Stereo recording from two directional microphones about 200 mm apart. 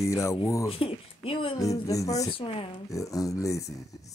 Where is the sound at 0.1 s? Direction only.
15° left (ahead or behind).